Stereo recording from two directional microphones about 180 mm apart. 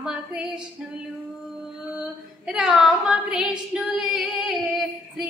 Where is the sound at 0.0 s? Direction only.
5° right (ahead or behind).